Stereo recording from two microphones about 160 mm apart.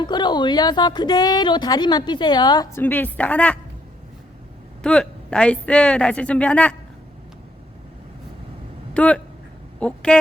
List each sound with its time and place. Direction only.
0.0 s a woman's voice: 25° left (ahead or behind)
2.7 s a woman's voice: 10° left (ahead or behind)
4.8 s a woman's voice: 5° left (ahead or behind)
8.9 s a woman's voice: 5° left (ahead or behind)